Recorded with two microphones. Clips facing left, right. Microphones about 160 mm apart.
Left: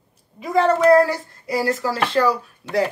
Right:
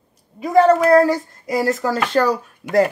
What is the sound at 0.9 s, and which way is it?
A child's voice, 40° right (ahead or behind).